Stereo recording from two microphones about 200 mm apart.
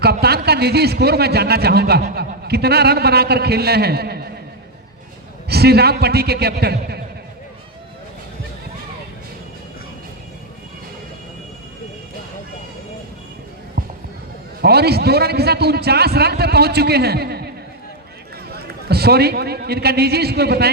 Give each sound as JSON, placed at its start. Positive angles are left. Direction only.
{"t": 0.0, "sound": "a man's voice", "side_deg": -55}
{"t": 5.5, "sound": "a man's voice", "side_deg": -55}
{"t": 14.6, "sound": "a man's voice", "side_deg": -55}
{"t": 18.5, "sound": "a man's voice", "side_deg": -50}